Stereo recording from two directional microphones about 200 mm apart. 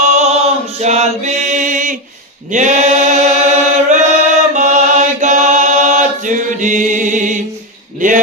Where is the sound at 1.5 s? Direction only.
40° right (ahead or behind).